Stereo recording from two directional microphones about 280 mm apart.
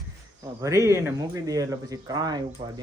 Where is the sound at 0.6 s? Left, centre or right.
Centre.